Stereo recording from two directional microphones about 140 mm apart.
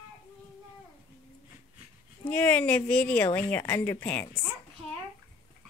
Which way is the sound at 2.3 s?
10° left (ahead or behind).